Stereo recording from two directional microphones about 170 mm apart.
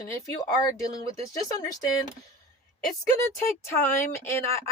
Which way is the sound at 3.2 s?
15° left (ahead or behind).